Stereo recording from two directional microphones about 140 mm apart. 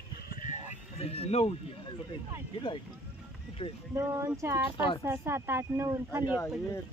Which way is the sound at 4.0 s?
20° right (ahead or behind).